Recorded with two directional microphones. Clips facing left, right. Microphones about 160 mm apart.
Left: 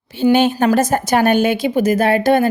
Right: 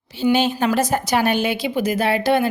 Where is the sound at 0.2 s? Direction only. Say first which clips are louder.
Left 5 dB; 55° left (ahead or behind).